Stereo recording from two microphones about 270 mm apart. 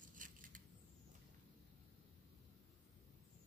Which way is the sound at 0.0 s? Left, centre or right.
Right.